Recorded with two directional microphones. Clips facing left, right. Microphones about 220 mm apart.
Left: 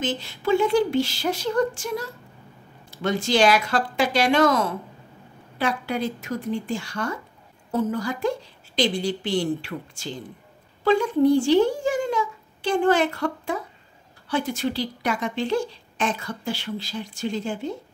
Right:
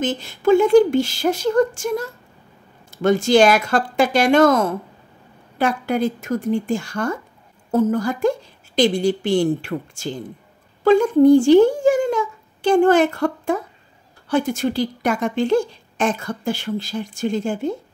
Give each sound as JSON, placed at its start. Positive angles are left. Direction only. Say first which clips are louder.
{"t": 0.0, "sound": "a woman's voice", "louder": "right 7 dB", "side_deg": -50}